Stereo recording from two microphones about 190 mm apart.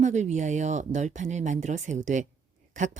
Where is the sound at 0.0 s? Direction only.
40° right (ahead or behind).